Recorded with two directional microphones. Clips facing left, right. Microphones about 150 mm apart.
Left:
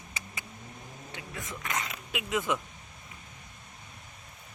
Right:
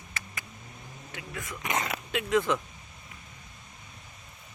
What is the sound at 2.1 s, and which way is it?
Speech, 10° left (ahead or behind).